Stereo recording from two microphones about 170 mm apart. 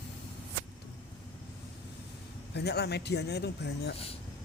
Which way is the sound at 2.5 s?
80° left.